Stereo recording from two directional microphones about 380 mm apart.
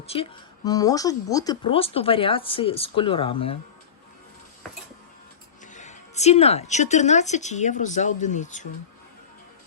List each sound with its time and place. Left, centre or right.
0.1 s speech: centre
5.7 s speech: centre